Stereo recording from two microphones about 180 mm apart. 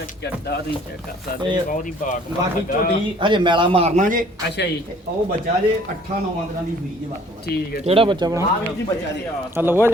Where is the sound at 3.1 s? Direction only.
25° right (ahead or behind); by 4.3 s 45° right (ahead or behind).